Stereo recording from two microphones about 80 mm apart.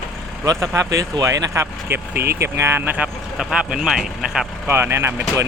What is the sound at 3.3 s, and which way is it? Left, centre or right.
Speech, centre.